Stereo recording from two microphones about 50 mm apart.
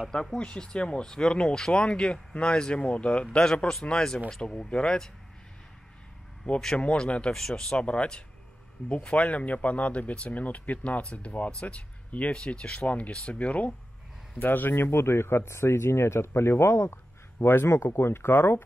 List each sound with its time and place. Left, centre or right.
0.4 s speech: centre
6.5 s speech: left
14.4 s speech: left
14.8 s speech: left
17.4 s speech: left